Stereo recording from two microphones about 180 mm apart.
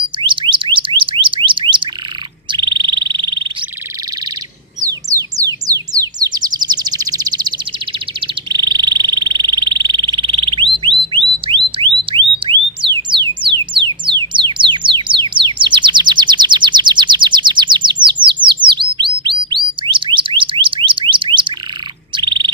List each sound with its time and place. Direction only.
0.2 s alarm: 25° right (ahead or behind)
2.5 s frog: 25° right (ahead or behind)
4.8 s bird: 20° right (ahead or behind)
8.5 s frog: 25° right (ahead or behind)
11.0 s a sound: 30° right (ahead or behind)
12.0 s alarm: 25° right (ahead or behind)
13.7 s music: 25° right (ahead or behind)
18.7 s bird: 25° right (ahead or behind)